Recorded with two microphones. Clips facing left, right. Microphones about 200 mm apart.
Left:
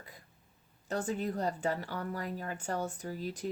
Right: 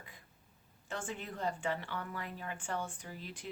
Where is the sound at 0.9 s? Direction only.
40° left (ahead or behind).